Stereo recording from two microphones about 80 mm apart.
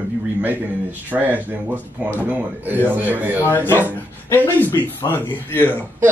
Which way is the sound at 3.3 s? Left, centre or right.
Left.